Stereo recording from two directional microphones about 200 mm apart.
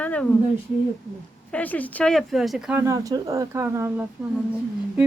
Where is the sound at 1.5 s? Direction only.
10° left (ahead or behind).